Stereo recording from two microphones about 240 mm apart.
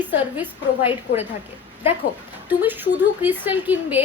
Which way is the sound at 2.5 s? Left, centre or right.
Centre.